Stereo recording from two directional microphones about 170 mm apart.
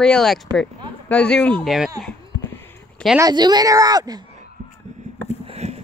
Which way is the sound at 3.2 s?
25° right (ahead or behind).